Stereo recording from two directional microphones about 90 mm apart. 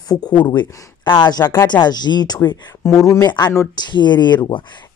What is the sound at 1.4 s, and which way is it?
Speech, 25° left (ahead or behind).